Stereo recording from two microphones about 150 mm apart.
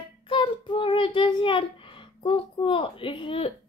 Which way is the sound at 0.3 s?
35° left (ahead or behind).